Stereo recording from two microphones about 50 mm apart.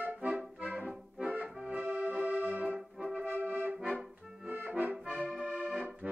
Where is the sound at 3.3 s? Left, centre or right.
Right.